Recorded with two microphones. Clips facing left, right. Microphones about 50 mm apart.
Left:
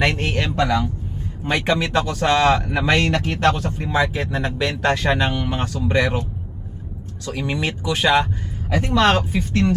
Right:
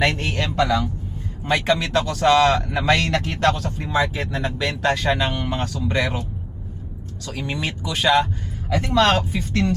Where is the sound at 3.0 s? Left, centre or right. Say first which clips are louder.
Left 2 dB; left.